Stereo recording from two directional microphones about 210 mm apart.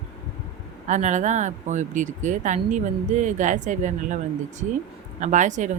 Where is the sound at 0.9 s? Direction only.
35° right (ahead or behind).